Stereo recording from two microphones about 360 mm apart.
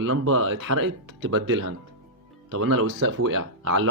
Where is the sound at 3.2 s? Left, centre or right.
Right.